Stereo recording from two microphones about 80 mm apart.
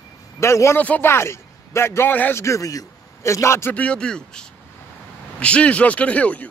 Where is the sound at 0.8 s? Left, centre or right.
Left.